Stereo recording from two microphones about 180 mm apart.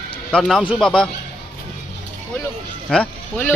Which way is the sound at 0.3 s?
5° left (ahead or behind).